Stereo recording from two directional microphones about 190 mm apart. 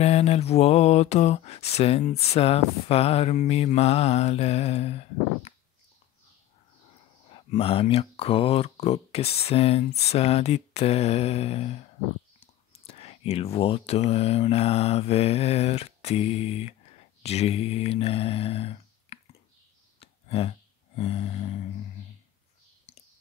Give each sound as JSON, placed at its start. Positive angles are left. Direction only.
{"t": 0.0, "sound": "mantra", "side_deg": 35}
{"t": 7.2, "sound": "mantra", "side_deg": 30}
{"t": 20.0, "sound": "a sound", "side_deg": 30}